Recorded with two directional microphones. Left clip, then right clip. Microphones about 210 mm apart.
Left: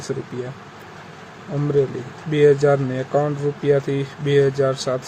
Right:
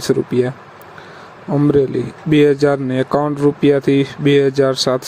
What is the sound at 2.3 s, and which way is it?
Speech, 40° right (ahead or behind).